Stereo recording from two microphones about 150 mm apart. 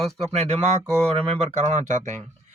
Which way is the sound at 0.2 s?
45° right (ahead or behind).